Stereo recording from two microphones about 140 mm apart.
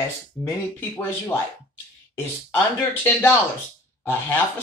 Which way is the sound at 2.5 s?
15° left (ahead or behind).